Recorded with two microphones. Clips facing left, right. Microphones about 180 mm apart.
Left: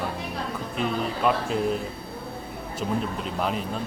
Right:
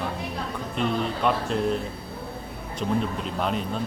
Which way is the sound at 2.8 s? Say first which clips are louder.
Right 2 dB; centre (ahead or behind).